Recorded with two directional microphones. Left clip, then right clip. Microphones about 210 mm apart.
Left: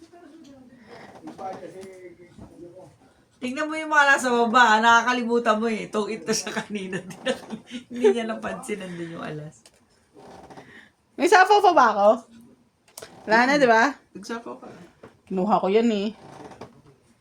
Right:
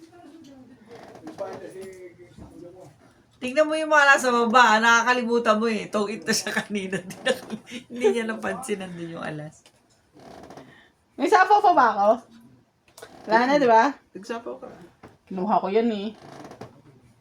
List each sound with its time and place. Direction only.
3.4 s speech: 30° right (ahead or behind)
11.2 s a woman's voice: 40° left (ahead or behind)